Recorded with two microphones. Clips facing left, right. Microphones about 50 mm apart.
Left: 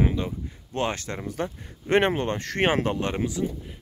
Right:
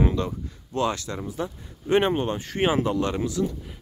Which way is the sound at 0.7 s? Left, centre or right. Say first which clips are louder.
Right 2 dB; left.